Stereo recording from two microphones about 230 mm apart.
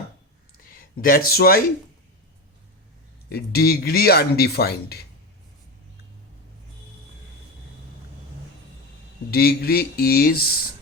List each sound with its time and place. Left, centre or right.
0.7 s speech: left
3.2 s speech: left
9.3 s speech: left